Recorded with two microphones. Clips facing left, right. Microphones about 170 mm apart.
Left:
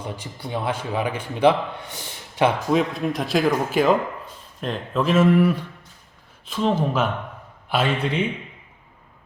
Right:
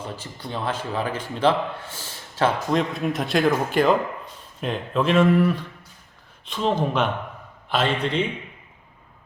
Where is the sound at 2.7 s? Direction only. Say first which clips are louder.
Left 2 dB; centre (ahead or behind).